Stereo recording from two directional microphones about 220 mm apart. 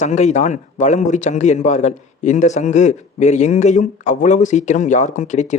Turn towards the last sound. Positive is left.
turn(degrees=35)  # may be behind; listen again after turning